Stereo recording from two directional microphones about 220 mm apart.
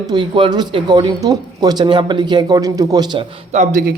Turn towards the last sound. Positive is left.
turn(degrees=-40)  # may be behind; listen again after turning